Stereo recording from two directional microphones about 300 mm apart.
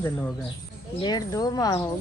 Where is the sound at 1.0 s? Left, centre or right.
Centre.